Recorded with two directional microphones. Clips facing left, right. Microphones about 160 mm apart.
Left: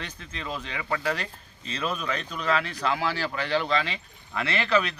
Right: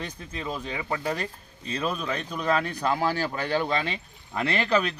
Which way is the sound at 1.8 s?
35° right (ahead or behind).